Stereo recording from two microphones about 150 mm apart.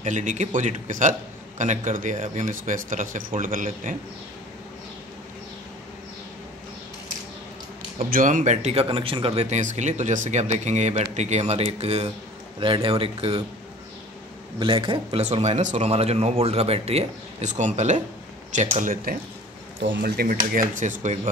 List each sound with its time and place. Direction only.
0.0 s speech: 55° right (ahead or behind)
8.1 s speech: 60° right (ahead or behind)
8.8 s speech: 35° right (ahead or behind)
14.6 s speech: 35° right (ahead or behind); by 19.1 s 60° right (ahead or behind)
20.0 s speech: 90° right
20.5 s speech: 55° right (ahead or behind)